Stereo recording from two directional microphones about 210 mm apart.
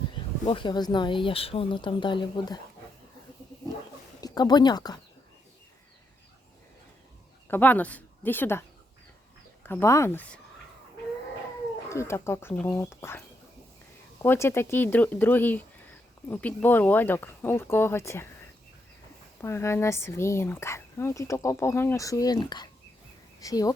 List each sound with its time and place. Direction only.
0.4 s speech: 20° left (ahead or behind)
4.2 s speech: 20° left (ahead or behind)
7.4 s speech: 10° left (ahead or behind)
9.6 s speech: 10° left (ahead or behind)
11.9 s speech: 15° left (ahead or behind)
19.4 s speech: 10° left (ahead or behind)